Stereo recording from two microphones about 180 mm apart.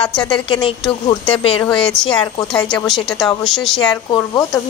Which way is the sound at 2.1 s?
25° left (ahead or behind).